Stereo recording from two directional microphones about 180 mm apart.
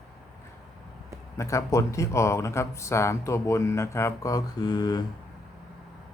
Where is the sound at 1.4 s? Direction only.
15° left (ahead or behind).